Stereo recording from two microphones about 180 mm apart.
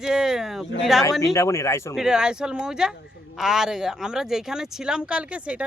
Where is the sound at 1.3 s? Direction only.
15° left (ahead or behind).